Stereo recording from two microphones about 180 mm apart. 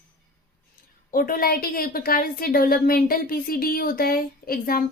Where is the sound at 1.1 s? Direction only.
50° left (ahead or behind).